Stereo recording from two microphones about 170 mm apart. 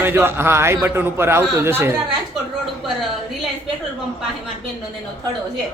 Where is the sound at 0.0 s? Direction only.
15° right (ahead or behind).